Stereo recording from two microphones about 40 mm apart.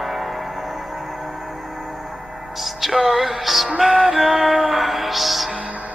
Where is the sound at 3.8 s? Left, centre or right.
Centre.